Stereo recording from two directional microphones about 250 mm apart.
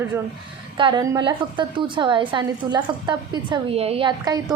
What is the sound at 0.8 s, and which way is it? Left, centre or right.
A woman's voice, centre.